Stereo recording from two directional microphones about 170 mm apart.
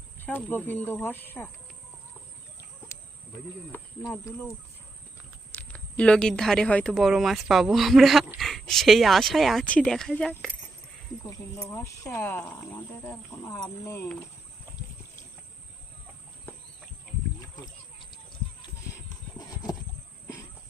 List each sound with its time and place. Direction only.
0.3 s speech: 10° left (ahead or behind)
2.9 s cricket: 15° left (ahead or behind)
3.7 s speech: 5° left (ahead or behind)
5.5 s speech: 10° left (ahead or behind)
11.7 s speech: 15° left (ahead or behind)